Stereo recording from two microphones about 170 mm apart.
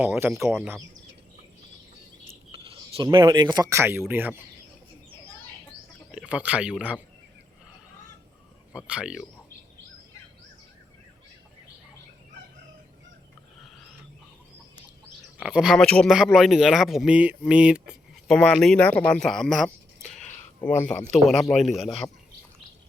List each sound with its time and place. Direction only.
0.0 s speech: 10° right (ahead or behind)
2.5 s speech: 30° right (ahead or behind); by 4.4 s 10° right (ahead or behind)
6.1 s speech: 5° right (ahead or behind)
8.7 s speech: 5° right (ahead or behind)
15.4 s speech: 5° right (ahead or behind)